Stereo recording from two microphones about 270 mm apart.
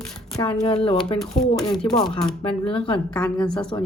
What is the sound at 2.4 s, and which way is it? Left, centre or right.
Speech, centre.